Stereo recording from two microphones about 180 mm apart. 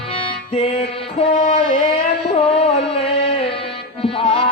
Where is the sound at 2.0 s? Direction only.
30° left (ahead or behind).